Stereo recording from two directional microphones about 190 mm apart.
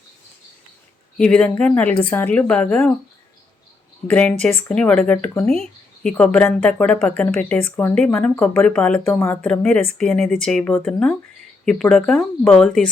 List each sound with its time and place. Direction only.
1.2 s speech: 5° left (ahead or behind)
4.1 s speech: 5° left (ahead or behind)